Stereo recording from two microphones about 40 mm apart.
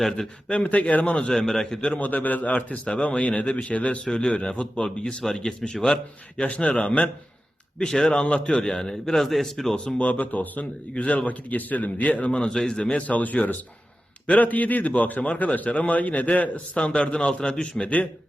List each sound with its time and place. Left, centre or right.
0.6 s a man's voice: left
1.5 s a man's voice: centre
2.0 s a man's voice: left
4.0 s a man's voice: left
5.0 s a man's voice: centre
7.8 s a man's voice: centre
10.0 s a man's voice: left
10.9 s a man's voice: left
11.3 s a man's voice: left
12.4 s a man's voice: centre
12.8 s a man's voice: left
16.7 s a man's voice: left